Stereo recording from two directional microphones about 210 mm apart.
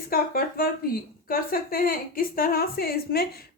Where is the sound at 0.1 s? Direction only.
45° left (ahead or behind).